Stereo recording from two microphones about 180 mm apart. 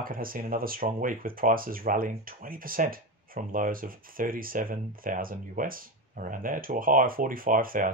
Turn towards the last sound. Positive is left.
turn(degrees=-50)  # may be behind; listen again after turning